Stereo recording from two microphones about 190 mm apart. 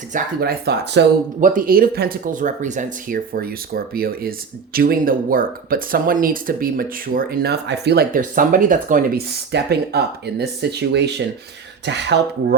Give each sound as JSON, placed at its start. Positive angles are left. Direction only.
{"t": 0.1, "sound": "speech", "side_deg": -55}
{"t": 1.4, "sound": "speech", "side_deg": -45}